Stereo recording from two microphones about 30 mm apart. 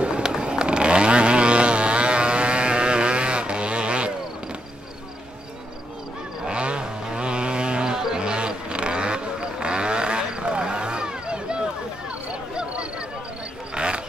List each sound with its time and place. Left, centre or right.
0.0 s vehicle: right
6.4 s vehicle: right
13.7 s a sound: right